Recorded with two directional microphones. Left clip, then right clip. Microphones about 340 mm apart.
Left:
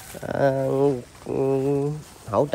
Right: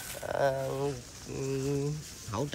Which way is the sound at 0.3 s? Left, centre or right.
Left.